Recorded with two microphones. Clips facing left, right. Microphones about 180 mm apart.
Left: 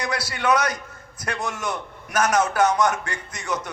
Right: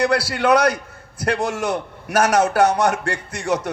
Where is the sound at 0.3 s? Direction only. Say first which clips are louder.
Right 6 dB; 60° right (ahead or behind).